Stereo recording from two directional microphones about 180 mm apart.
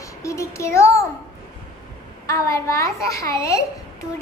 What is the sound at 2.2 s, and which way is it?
A child's voice, 15° left (ahead or behind).